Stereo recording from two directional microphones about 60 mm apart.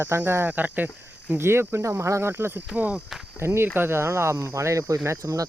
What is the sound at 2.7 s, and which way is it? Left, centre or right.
Speech, left.